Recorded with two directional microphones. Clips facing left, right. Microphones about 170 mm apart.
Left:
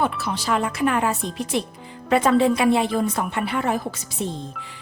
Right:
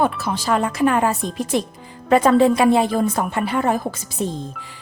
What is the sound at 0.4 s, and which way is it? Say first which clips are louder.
A woman's voice: right 4 dB; 40° right (ahead or behind).